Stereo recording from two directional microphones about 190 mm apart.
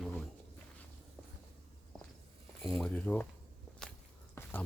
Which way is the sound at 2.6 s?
15° left (ahead or behind).